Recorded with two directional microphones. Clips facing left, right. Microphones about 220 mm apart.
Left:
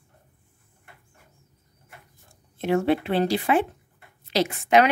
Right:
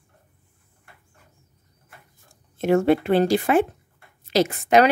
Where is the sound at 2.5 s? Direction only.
45° right (ahead or behind).